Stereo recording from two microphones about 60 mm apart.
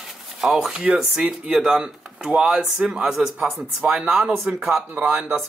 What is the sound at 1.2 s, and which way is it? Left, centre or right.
Speech, centre.